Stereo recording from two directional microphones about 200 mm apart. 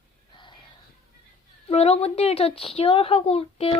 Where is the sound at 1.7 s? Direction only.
30° left (ahead or behind).